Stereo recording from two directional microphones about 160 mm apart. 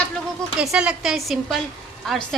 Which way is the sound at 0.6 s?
5° right (ahead or behind).